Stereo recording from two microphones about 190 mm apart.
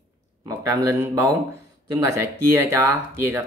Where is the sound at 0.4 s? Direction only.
15° right (ahead or behind).